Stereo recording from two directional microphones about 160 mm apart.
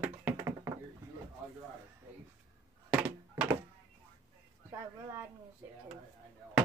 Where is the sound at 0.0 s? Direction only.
10° right (ahead or behind).